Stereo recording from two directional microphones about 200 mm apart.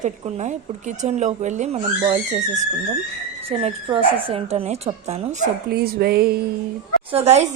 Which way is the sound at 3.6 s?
30° right (ahead or behind).